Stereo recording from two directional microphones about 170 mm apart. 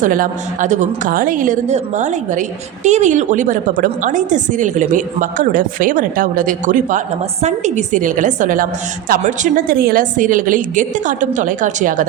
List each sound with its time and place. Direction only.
0.0 s a woman's voice: 50° right (ahead or behind)